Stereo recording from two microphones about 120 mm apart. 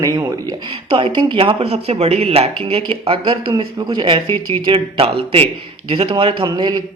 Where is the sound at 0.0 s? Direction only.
30° right (ahead or behind).